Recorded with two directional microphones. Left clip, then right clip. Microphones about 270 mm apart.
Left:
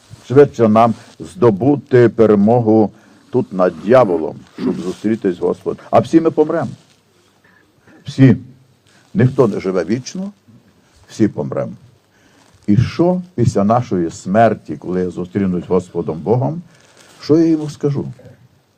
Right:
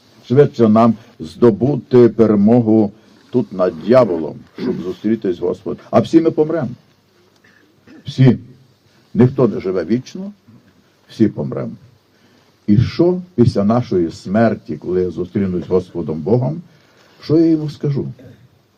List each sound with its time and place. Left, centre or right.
0.3 s a man's voice: left
8.2 s a man's voice: centre